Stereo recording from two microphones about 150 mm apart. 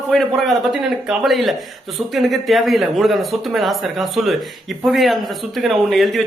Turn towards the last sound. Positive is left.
turn(degrees=0)  # may be behind; listen again after turning